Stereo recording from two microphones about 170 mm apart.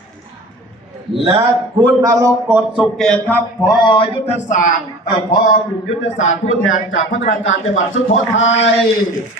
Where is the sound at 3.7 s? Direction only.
25° left (ahead or behind); by 7.3 s 50° left (ahead or behind).